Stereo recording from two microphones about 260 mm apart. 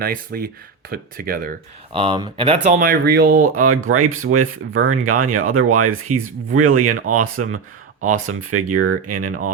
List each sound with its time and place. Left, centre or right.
0.0 s speech: right
2.0 s speech: centre
3.5 s speech: right